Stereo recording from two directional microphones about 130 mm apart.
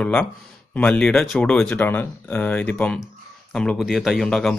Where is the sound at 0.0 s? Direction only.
5° left (ahead or behind).